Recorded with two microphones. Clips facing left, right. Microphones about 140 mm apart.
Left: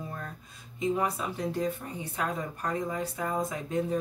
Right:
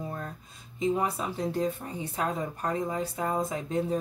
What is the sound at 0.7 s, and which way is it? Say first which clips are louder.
Speech: right 1 dB; 30° right (ahead or behind).